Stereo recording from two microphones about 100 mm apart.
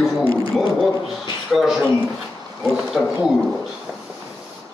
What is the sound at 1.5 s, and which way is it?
Speech, centre (ahead or behind).